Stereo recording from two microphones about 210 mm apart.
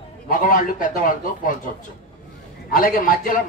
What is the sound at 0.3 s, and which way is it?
A man's voice, 40° left (ahead or behind).